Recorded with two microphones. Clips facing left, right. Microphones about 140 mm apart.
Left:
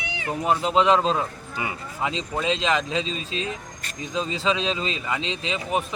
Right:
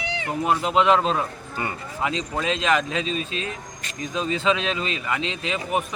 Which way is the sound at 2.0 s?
30° left (ahead or behind).